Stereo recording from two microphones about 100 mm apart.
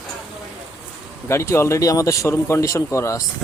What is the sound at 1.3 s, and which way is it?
A man's voice, 25° left (ahead or behind).